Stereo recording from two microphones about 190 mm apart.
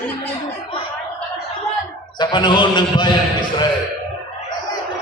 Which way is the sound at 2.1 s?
25° left (ahead or behind).